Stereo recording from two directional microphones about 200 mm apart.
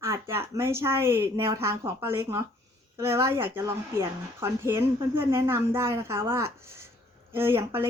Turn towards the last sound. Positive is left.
turn(degrees=-10)  # may be behind; listen again after turning